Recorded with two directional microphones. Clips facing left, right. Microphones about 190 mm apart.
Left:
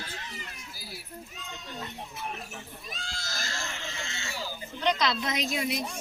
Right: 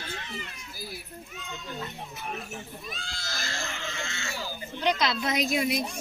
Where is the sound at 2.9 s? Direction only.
40° left (ahead or behind).